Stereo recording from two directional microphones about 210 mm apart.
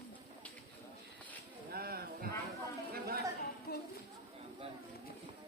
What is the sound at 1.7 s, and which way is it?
Snake, 45° right (ahead or behind).